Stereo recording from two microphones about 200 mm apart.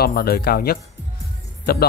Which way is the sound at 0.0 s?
50° left (ahead or behind).